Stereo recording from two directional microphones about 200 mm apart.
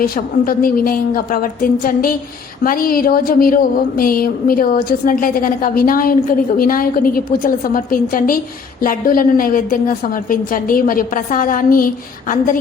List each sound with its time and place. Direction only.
0.0 s a woman's voice: 45° left (ahead or behind)